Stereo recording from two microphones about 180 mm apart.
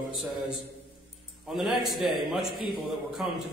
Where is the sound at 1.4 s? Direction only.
Centre (ahead or behind).